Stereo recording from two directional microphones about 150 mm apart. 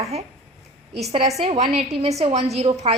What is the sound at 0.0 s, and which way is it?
Speech, 45° right (ahead or behind).